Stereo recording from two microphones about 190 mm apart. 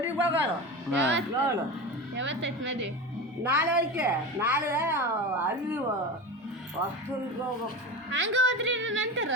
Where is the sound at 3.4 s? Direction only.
10° right (ahead or behind).